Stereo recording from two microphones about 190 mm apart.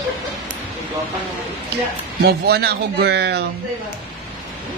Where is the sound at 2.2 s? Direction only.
55° right (ahead or behind).